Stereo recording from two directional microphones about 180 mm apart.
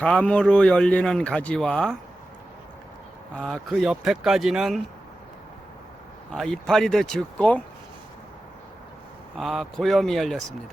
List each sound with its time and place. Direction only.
0.0 s a man's voice: 5° left (ahead or behind)
3.3 s a man's voice: centre (ahead or behind)
6.3 s a man's voice: centre (ahead or behind)
9.4 s a man's voice: centre (ahead or behind)